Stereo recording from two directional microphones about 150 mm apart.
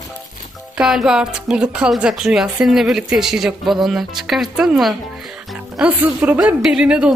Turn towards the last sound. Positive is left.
turn(degrees=-5)  # may be behind; listen again after turning